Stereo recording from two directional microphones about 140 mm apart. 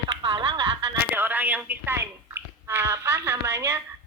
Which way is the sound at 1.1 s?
15° right (ahead or behind).